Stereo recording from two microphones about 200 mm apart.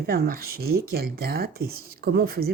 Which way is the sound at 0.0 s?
50° right (ahead or behind).